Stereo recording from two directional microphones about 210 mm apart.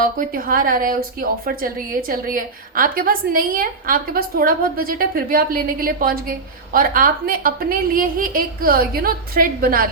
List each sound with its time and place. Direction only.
0.0 s a woman's voice: 40° right (ahead or behind)